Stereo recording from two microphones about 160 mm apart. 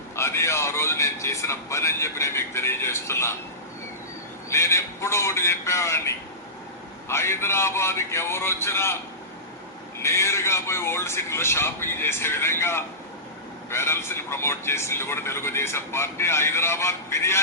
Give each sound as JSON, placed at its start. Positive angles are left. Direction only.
{"t": 0.2, "sound": "speech", "side_deg": 15}
{"t": 4.4, "sound": "speech", "side_deg": 15}
{"t": 10.0, "sound": "speech", "side_deg": 15}